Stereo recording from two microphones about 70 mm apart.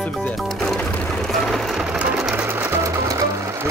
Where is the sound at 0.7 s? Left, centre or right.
Centre.